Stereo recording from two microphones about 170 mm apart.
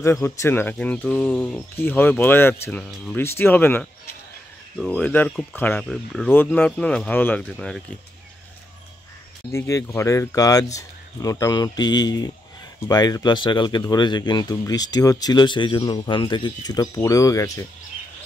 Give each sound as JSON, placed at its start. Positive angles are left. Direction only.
{"t": 0.0, "sound": "speech", "side_deg": 15}
{"t": 9.5, "sound": "speech", "side_deg": 15}